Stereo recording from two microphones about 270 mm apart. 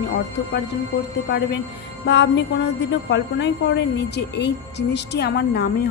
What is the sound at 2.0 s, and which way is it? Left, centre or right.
A woman's voice, left.